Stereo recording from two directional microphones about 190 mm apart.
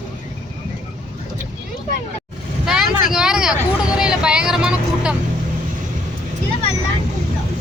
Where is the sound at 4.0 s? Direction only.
5° right (ahead or behind).